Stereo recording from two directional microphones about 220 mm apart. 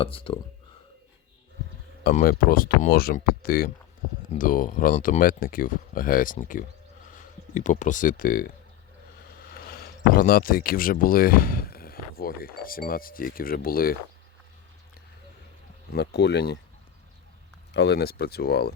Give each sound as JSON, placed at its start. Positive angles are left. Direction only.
{"t": 0.0, "sound": "speech", "side_deg": 25}
{"t": 2.0, "sound": "speech", "side_deg": 40}
{"t": 16.0, "sound": "speech", "side_deg": 50}
{"t": 17.7, "sound": "speech", "side_deg": 50}